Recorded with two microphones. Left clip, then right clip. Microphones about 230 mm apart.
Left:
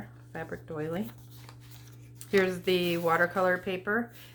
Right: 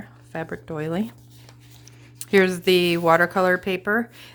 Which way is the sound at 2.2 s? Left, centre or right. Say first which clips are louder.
Right 8 dB; right.